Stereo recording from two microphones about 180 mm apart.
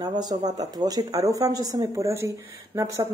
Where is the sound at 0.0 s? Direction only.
25° right (ahead or behind).